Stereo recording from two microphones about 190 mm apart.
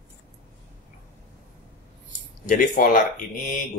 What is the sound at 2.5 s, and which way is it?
Speech, 45° left (ahead or behind).